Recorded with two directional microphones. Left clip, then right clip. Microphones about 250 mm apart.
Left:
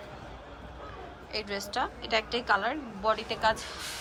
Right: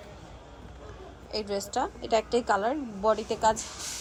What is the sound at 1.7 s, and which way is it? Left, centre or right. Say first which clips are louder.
A woman's voice: right 2 dB; centre.